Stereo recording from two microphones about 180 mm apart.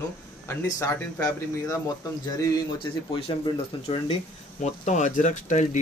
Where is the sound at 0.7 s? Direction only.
15° left (ahead or behind).